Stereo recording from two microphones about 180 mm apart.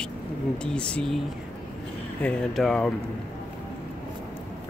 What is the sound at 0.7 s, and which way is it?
Speech, 5° left (ahead or behind).